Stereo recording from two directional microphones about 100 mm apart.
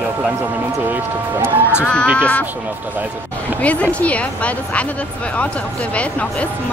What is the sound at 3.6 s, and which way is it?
Speech, 15° left (ahead or behind).